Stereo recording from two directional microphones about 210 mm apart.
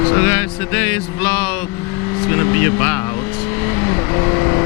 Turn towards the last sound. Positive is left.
turn(degrees=15)  # may be behind; listen again after turning